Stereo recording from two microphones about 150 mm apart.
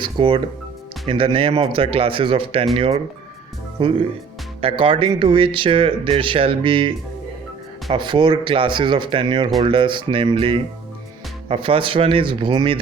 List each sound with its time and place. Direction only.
0.0 s speech: 35° right (ahead or behind)